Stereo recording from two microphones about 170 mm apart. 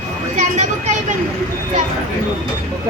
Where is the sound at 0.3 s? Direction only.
45° right (ahead or behind).